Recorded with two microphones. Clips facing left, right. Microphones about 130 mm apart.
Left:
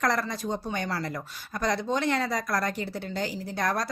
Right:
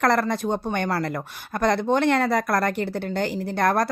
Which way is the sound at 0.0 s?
60° right (ahead or behind).